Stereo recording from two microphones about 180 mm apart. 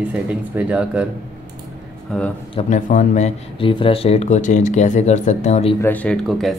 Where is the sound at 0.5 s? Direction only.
5° right (ahead or behind).